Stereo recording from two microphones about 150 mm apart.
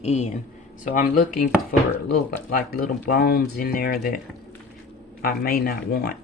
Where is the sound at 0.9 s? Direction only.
65° left (ahead or behind).